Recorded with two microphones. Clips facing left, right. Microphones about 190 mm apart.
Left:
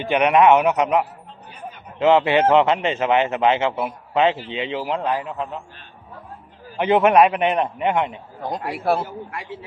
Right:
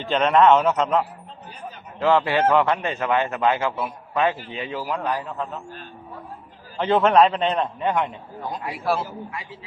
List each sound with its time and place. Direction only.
0.0 s a man's voice: 15° left (ahead or behind)
2.0 s a man's voice: 20° left (ahead or behind)
6.7 s a man's voice: 15° left (ahead or behind)
8.4 s a man's voice: 65° left (ahead or behind)